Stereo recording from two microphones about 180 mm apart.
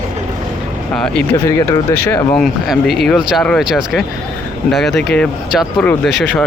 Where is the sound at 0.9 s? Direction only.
5° left (ahead or behind).